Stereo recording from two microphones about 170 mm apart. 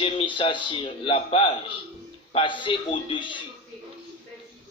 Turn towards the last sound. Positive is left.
turn(degrees=30)  # may be behind; listen again after turning